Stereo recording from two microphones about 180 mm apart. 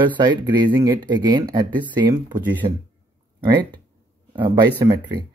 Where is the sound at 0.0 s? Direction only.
25° right (ahead or behind).